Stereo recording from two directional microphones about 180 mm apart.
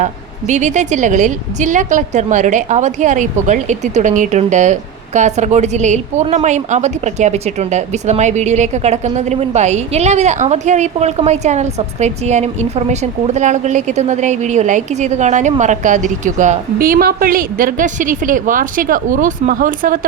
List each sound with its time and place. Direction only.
0.0 s a woman's voice: 40° right (ahead or behind)